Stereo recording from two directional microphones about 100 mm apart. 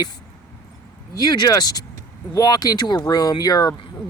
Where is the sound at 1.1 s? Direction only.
40° left (ahead or behind).